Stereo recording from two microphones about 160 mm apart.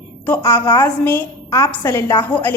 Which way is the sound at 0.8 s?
15° left (ahead or behind).